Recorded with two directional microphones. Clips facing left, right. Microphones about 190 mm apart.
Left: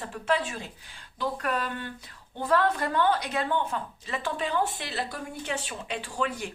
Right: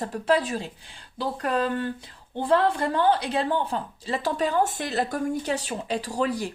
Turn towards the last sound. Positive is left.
turn(degrees=-35)  # may be behind; listen again after turning